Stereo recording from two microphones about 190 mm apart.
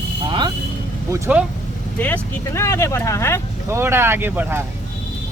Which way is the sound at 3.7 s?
10° right (ahead or behind).